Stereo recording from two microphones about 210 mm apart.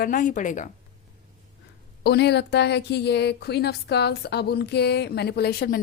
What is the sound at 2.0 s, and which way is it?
A woman's voice, 50° left (ahead or behind).